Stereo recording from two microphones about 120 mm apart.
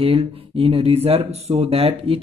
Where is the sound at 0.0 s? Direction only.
50° right (ahead or behind).